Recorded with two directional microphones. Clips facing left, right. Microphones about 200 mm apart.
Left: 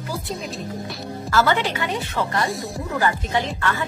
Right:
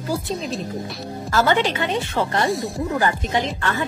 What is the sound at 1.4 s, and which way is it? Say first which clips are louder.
Speech: right 6 dB; 20° right (ahead or behind).